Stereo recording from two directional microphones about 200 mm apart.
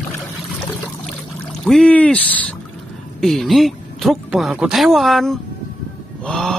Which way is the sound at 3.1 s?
Centre (ahead or behind).